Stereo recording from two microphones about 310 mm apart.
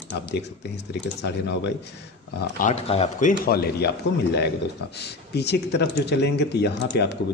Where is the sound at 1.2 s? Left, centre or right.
Left.